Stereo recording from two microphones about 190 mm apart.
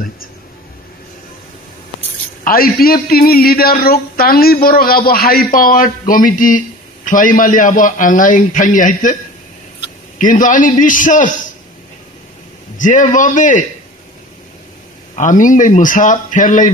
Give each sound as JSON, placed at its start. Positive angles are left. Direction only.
{"t": 2.4, "sound": "a man's voice", "side_deg": 50}
{"t": 10.1, "sound": "a man's voice", "side_deg": 45}
{"t": 12.7, "sound": "a man's voice", "side_deg": 40}
{"t": 15.1, "sound": "a man's voice", "side_deg": 45}